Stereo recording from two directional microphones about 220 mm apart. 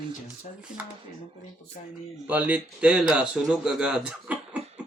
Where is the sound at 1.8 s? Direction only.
35° left (ahead or behind).